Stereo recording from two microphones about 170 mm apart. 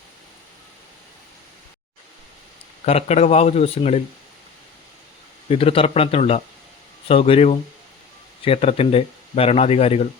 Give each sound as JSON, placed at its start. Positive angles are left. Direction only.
{"t": 2.8, "sound": "speech", "side_deg": 40}
{"t": 5.5, "sound": "speech", "side_deg": 35}